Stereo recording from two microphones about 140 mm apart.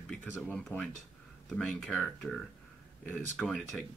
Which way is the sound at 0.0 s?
5° left (ahead or behind).